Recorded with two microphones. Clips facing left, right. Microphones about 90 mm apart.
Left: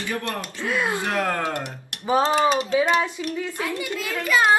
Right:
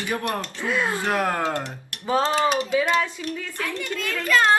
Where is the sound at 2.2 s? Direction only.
5° left (ahead or behind).